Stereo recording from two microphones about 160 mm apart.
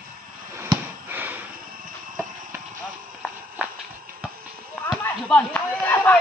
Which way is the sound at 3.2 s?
5° right (ahead or behind).